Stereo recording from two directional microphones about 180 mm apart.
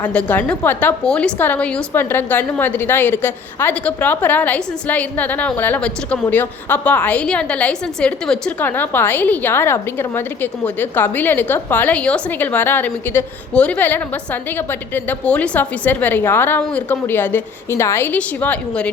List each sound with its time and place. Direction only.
0.0 s a woman's voice: 10° left (ahead or behind)